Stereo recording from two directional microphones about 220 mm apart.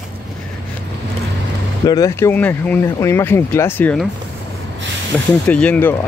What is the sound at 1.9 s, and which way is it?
Speech, 15° left (ahead or behind).